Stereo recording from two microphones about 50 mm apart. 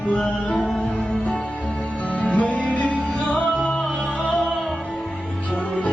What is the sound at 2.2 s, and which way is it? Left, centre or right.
Music, left.